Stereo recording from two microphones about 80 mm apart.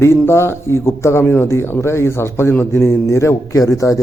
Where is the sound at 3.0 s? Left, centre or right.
Left.